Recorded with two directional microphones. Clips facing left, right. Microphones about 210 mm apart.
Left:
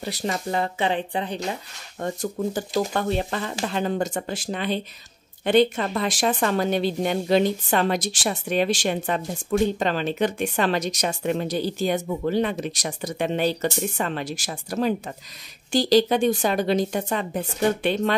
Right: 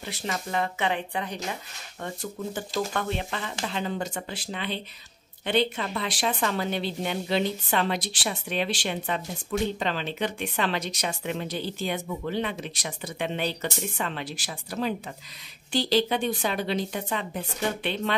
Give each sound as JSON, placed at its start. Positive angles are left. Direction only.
{"t": 0.0, "sound": "speech", "side_deg": 40}
{"t": 2.0, "sound": "speech", "side_deg": 40}